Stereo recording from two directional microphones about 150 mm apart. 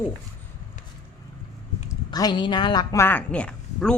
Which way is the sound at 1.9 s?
25° left (ahead or behind).